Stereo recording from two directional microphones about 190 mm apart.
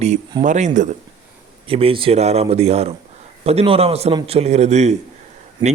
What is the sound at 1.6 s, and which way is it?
A man's voice, 30° right (ahead or behind).